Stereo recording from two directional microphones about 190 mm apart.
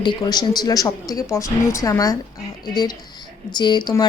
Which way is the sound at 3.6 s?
20° left (ahead or behind).